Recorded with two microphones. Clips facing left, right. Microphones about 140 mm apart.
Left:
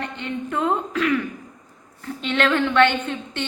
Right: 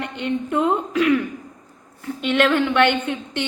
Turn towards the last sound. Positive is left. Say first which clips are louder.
# right 3 dB
turn(degrees=-15)  # may be behind; listen again after turning